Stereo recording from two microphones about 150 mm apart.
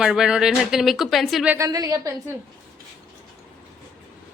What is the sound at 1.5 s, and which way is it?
Speech, 20° right (ahead or behind).